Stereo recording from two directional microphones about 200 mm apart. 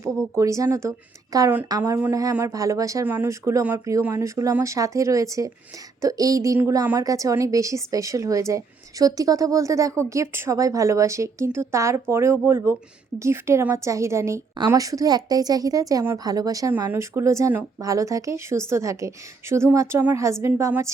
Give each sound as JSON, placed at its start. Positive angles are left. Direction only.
{"t": 0.3, "sound": "a woman's voice", "side_deg": -15}